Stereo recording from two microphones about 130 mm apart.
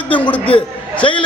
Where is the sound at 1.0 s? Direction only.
40° left (ahead or behind).